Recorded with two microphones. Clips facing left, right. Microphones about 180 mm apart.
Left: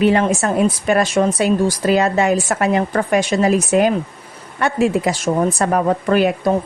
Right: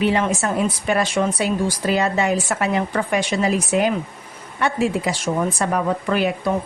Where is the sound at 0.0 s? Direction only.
45° left (ahead or behind).